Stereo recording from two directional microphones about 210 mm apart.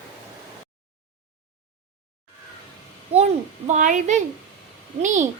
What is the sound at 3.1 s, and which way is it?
A child's voice, 30° right (ahead or behind).